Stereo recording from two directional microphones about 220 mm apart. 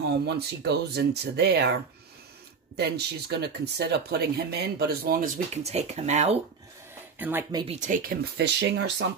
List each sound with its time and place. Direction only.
0.1 s speech: 50° right (ahead or behind)
2.8 s speech: 45° right (ahead or behind); by 6.3 s 30° right (ahead or behind)
7.2 s speech: 10° right (ahead or behind)
7.6 s speech: 30° right (ahead or behind); by 9.0 s 50° right (ahead or behind)